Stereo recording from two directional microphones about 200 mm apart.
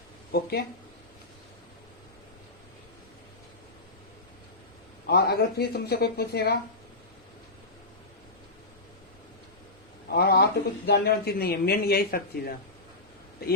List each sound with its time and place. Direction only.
0.3 s speech: 55° left (ahead or behind)
5.0 s speech: 55° left (ahead or behind)
10.1 s a man's voice: 50° left (ahead or behind)